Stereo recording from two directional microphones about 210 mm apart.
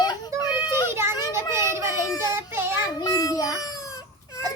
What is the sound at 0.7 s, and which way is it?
Children playing, 10° right (ahead or behind).